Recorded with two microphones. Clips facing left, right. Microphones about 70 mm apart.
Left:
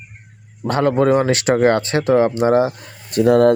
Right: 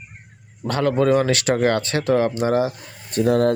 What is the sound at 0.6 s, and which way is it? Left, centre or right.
Speech, left.